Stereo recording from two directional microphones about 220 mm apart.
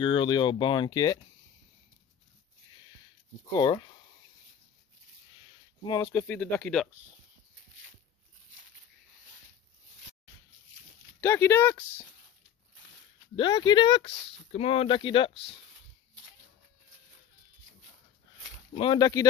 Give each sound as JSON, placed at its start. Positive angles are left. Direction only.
{"t": 0.0, "sound": "speech", "side_deg": 20}
{"t": 3.5, "sound": "speech", "side_deg": 20}
{"t": 5.9, "sound": "speech", "side_deg": 15}
{"t": 6.2, "sound": "speech", "side_deg": 5}
{"t": 11.1, "sound": "speech", "side_deg": 10}
{"t": 13.4, "sound": "speech", "side_deg": 20}
{"t": 18.8, "sound": "speech", "side_deg": 20}